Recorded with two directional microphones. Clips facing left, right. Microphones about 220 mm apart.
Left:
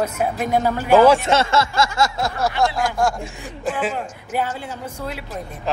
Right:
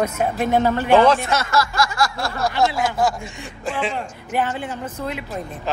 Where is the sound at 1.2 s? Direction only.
25° left (ahead or behind).